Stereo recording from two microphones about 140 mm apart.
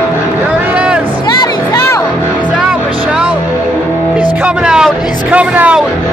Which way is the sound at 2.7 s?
5° right (ahead or behind).